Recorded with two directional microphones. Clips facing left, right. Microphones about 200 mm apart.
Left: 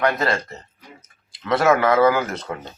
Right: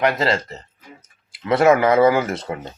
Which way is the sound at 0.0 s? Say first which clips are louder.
Right 2 dB; 25° right (ahead or behind).